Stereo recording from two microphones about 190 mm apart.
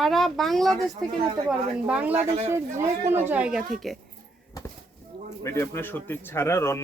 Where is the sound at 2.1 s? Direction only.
35° right (ahead or behind).